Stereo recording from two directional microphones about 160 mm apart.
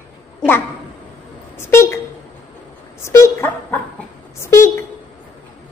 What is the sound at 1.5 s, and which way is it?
Speech, 15° left (ahead or behind).